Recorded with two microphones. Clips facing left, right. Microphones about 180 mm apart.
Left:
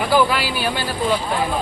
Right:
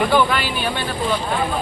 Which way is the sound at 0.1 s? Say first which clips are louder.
Even; 5° left (ahead or behind).